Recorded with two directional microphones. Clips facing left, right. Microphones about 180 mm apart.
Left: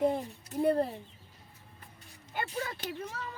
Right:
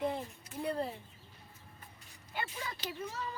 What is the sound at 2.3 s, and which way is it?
Speech, 40° left (ahead or behind).